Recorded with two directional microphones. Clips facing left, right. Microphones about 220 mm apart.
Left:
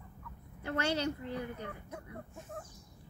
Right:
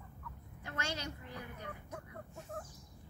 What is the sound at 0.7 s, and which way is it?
Speech, 30° left (ahead or behind).